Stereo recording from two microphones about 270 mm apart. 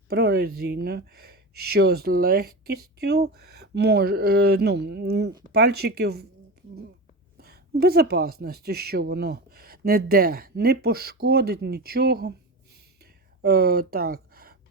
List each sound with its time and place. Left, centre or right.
0.1 s speech: right
7.3 s speech: right
13.4 s speech: right